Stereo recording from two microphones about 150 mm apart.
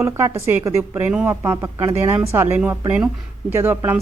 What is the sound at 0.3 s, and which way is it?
A woman's voice, 15° right (ahead or behind).